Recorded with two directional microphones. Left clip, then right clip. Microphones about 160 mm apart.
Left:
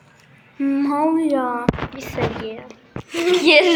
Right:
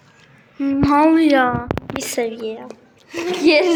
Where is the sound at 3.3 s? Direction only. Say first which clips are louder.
Left 1 dB; 20° right (ahead or behind).